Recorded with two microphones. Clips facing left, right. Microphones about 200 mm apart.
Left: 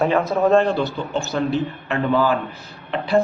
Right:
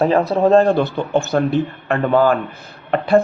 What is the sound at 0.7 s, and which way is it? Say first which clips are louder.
A man's voice: right 5 dB; 55° right (ahead or behind).